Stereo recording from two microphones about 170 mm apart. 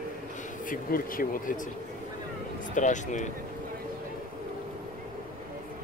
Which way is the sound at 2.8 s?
45° left (ahead or behind).